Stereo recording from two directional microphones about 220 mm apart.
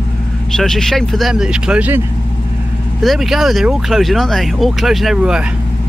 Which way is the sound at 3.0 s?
Centre (ahead or behind).